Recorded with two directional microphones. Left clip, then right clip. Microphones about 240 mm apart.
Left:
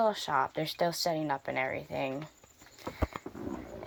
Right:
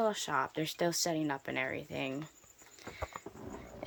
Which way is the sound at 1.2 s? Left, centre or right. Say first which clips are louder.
Left 3 dB; right.